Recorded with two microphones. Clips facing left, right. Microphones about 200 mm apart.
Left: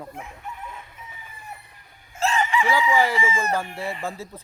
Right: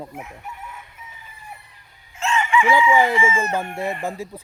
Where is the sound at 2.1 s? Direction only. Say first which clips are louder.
Right 2 dB; 35° left (ahead or behind).